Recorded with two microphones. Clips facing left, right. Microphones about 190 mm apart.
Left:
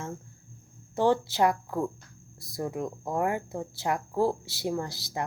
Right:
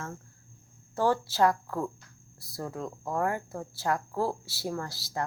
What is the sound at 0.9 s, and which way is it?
Speech, 20° left (ahead or behind).